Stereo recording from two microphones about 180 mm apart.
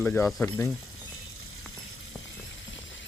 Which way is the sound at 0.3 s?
Centre (ahead or behind).